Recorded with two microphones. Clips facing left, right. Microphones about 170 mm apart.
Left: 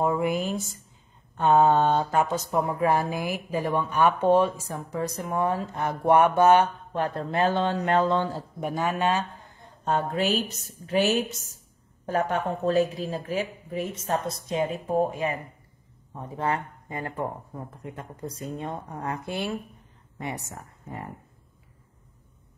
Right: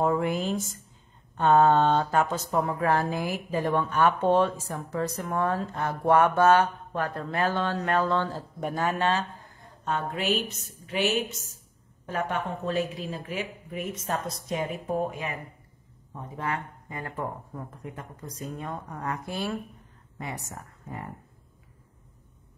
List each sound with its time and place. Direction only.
0.0 s speech: 10° left (ahead or behind)
9.8 s speech: 40° left (ahead or behind)
16.3 s speech: 30° left (ahead or behind)
18.6 s a woman's voice: 25° left (ahead or behind)